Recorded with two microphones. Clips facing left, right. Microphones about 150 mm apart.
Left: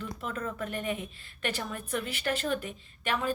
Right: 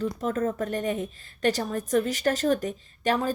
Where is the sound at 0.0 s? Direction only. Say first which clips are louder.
Right 9 dB; 40° right (ahead or behind).